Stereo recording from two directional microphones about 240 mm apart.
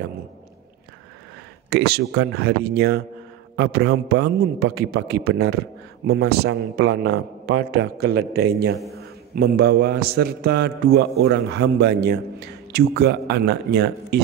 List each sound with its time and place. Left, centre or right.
1.7 s a man's voice: right